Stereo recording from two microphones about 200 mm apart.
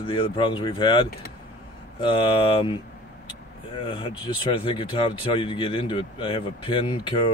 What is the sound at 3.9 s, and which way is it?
Speech, 25° left (ahead or behind).